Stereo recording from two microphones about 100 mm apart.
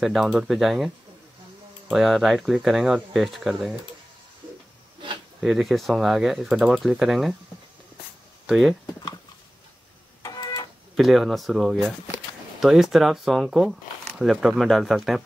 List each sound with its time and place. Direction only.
0.0 s speech: centre (ahead or behind)
5.4 s speech: centre (ahead or behind)
8.5 s speech: centre (ahead or behind)
10.3 s printer: 45° left (ahead or behind)
11.0 s speech: centre (ahead or behind)